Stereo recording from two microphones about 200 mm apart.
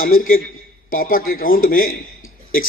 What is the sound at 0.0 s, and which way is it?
A man's voice, 45° left (ahead or behind).